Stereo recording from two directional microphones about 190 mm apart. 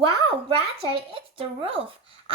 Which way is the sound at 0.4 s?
30° right (ahead or behind).